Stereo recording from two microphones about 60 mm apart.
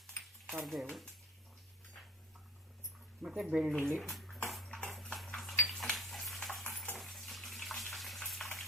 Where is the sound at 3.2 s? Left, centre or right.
Centre.